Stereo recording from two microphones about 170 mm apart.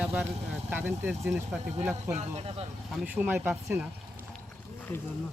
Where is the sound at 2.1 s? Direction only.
40° right (ahead or behind).